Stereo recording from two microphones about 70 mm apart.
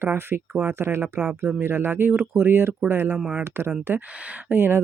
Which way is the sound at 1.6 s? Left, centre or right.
Right.